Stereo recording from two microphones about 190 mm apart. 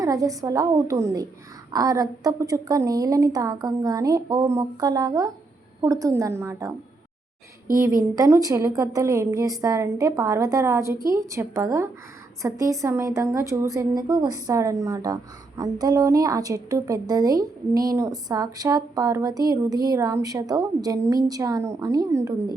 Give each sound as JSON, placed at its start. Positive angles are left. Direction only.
{"t": 0.0, "sound": "a woman's voice", "side_deg": -20}
{"t": 8.1, "sound": "a woman's voice", "side_deg": -20}